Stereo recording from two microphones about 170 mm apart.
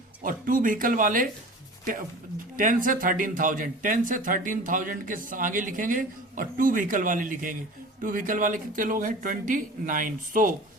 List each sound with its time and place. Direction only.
0.2 s speech: 55° right (ahead or behind)
2.6 s speech: 50° right (ahead or behind)